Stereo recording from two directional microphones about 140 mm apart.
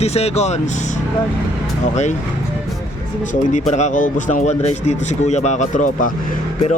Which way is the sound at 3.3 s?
60° left (ahead or behind).